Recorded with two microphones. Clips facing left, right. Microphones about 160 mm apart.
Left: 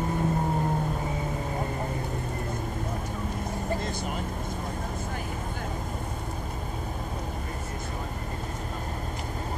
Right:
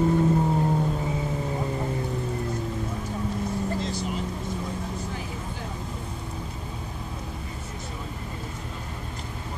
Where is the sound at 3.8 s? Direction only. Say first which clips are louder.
Right 2 dB; 55° left (ahead or behind).